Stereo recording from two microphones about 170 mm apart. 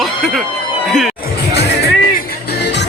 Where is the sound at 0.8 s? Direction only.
Centre (ahead or behind).